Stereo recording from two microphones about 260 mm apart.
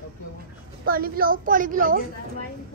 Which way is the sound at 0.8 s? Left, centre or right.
Right.